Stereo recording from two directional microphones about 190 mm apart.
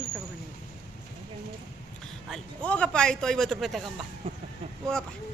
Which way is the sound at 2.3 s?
5° left (ahead or behind).